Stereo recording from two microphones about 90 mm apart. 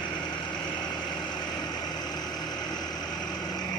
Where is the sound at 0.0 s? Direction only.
55° left (ahead or behind).